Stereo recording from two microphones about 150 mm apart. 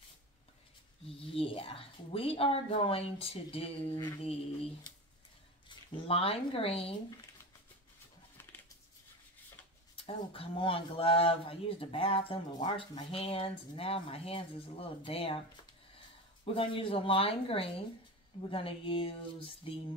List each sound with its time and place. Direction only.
1.2 s speech: 40° left (ahead or behind)
5.7 s speech: 40° left (ahead or behind)
8.4 s a sound: 15° left (ahead or behind)
9.9 s speech: 40° left (ahead or behind)
13.1 s speech: 40° left (ahead or behind)
16.4 s speech: 35° left (ahead or behind)